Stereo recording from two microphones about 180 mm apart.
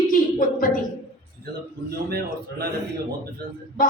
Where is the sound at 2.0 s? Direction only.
60° right (ahead or behind).